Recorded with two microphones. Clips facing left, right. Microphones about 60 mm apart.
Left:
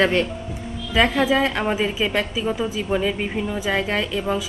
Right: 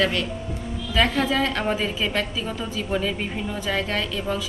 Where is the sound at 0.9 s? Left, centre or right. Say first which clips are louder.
Left 3 dB; centre.